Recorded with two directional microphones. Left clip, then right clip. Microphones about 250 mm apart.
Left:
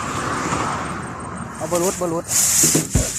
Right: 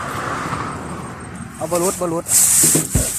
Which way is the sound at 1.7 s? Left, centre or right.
Centre.